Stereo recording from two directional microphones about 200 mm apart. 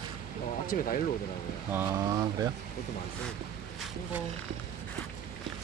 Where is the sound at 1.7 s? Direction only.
15° right (ahead or behind).